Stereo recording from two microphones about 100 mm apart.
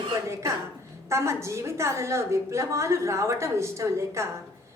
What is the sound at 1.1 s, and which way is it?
A woman's voice, 30° right (ahead or behind).